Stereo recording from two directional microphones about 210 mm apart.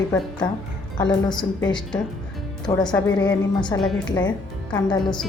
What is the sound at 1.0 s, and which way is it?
Speech, 20° left (ahead or behind).